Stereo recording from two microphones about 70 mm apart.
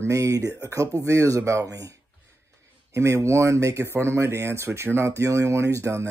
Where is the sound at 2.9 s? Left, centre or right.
Right.